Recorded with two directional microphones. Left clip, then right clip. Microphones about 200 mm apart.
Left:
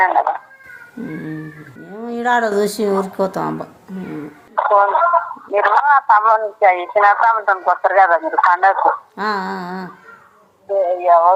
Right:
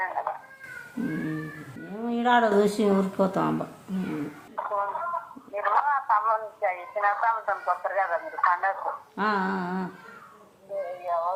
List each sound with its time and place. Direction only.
0.0 s speech: 50° left (ahead or behind)
2.0 s speech: 35° left (ahead or behind)
4.5 s speech: 50° left (ahead or behind)
9.1 s speech: 35° left (ahead or behind)
11.0 s speech: 50° left (ahead or behind)